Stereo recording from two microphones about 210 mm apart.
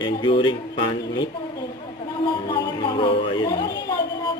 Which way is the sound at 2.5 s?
20° left (ahead or behind).